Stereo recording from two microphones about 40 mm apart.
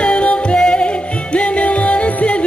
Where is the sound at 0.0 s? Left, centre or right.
Left.